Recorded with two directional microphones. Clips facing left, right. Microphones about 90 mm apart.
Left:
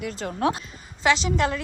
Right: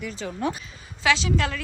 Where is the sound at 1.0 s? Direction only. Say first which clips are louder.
Left 1 dB; 20° left (ahead or behind).